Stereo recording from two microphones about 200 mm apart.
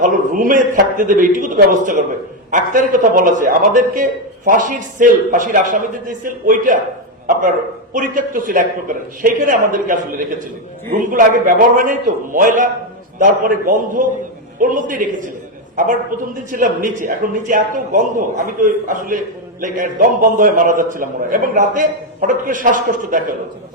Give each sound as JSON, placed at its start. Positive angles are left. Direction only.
{"t": 0.0, "sound": "a man's voice", "side_deg": -40}